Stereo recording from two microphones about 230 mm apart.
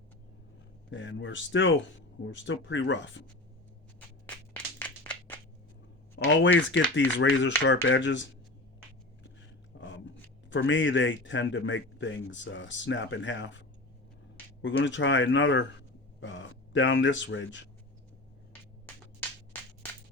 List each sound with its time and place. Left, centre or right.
0.9 s a man's voice: left
4.3 s a sound: centre
6.1 s a man's voice: left
10.5 s a man's voice: left
14.6 s a man's voice: left